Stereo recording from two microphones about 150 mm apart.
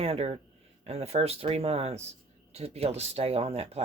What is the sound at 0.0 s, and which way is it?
Speech, 40° right (ahead or behind).